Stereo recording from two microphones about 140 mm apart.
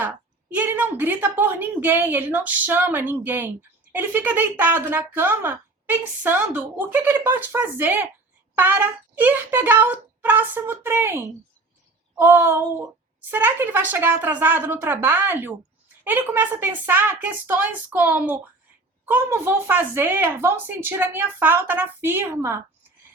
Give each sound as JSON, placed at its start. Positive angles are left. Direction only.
{"t": 0.0, "sound": "speech", "side_deg": -10}